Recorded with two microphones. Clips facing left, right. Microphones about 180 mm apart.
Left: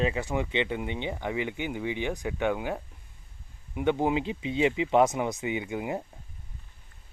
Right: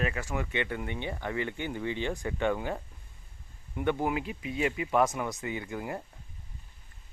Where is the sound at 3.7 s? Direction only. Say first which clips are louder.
Left 3 dB; 15° left (ahead or behind).